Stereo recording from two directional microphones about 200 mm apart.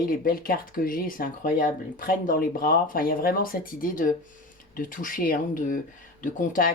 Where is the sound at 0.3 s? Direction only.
45° left (ahead or behind).